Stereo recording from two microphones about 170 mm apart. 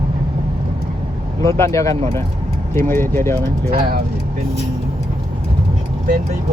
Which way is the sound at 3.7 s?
60° right (ahead or behind).